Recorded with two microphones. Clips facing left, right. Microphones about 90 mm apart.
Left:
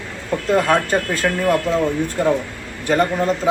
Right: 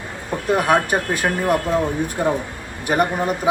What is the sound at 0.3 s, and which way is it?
Speech, 15° right (ahead or behind).